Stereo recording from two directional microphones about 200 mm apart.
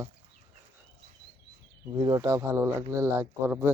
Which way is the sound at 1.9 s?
20° right (ahead or behind).